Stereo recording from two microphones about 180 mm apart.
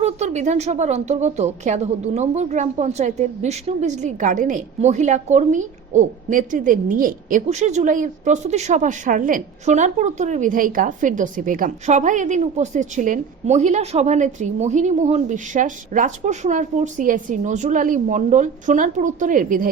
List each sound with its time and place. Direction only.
0.0 s a woman's voice: 40° right (ahead or behind)